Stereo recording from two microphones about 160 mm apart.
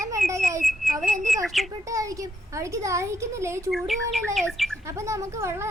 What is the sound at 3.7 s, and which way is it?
Speech, centre (ahead or behind).